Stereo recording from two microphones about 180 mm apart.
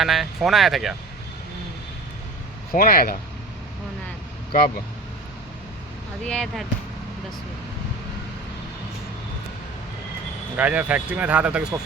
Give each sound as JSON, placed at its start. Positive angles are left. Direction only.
{"t": 0.0, "sound": "speech", "side_deg": 0}
{"t": 2.7, "sound": "speech", "side_deg": 55}
{"t": 6.2, "sound": "speech", "side_deg": 5}
{"t": 10.6, "sound": "speech", "side_deg": -10}